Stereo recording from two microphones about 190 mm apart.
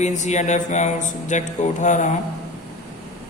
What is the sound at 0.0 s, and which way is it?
Mantra, 40° left (ahead or behind).